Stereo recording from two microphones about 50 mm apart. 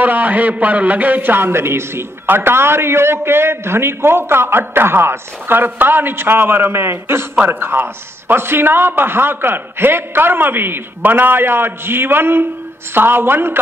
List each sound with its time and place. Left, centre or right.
0.0 s a man's voice: right